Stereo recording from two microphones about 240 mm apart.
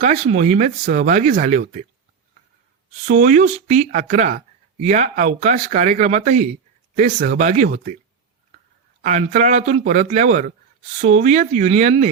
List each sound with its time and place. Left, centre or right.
0.0 s speech: right
3.1 s speech: right
9.0 s speech: right